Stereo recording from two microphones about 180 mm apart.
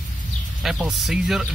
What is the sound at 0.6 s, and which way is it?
Speech, centre (ahead or behind).